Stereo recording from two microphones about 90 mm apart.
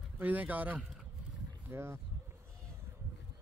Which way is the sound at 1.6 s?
30° right (ahead or behind).